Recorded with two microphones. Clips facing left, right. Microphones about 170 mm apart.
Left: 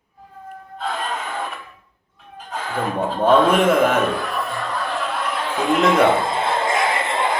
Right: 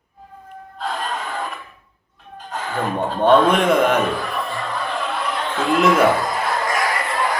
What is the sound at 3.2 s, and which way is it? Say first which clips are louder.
Music: even; 5° left (ahead or behind).